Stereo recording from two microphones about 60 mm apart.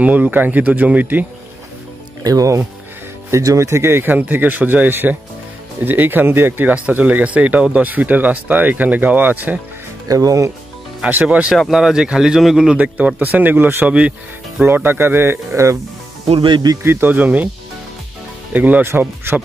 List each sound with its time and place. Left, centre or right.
0.0 s speech: right
2.2 s speech: right
3.3 s speech: right
4.0 s speech: right
6.7 s speech: right
10.0 s speech: right
11.0 s speech: right
11.2 s a man's voice: centre
12.8 s speech: right
13.8 s speech: right
14.6 s speech: right
16.8 s speech: right
18.5 s speech: right
18.9 s speech: right